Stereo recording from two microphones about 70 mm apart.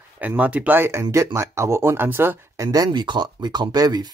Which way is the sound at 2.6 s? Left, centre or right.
Right.